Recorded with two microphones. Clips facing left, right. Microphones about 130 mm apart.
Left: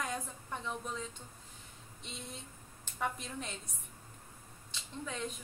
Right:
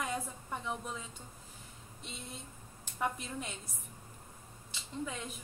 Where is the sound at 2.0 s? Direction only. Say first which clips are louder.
Even; centre (ahead or behind).